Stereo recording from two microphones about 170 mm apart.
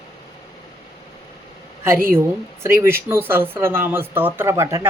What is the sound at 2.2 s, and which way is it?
Speech, 15° right (ahead or behind).